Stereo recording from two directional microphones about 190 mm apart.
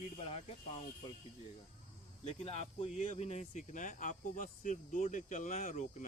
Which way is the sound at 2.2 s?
35° left (ahead or behind).